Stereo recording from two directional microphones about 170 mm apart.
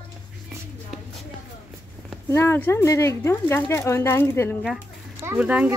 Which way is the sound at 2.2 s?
15° left (ahead or behind).